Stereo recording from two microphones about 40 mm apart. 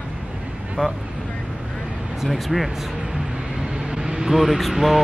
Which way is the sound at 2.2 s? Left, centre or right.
Centre.